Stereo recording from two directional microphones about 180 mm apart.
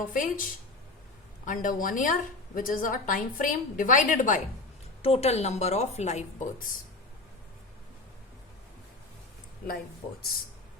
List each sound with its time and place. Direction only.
0.0 s a woman's voice: 50° left (ahead or behind)
1.5 s a woman's voice: 45° left (ahead or behind)
5.0 s a woman's voice: 35° left (ahead or behind)